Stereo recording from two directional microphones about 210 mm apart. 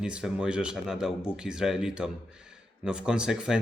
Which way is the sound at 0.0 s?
5° right (ahead or behind).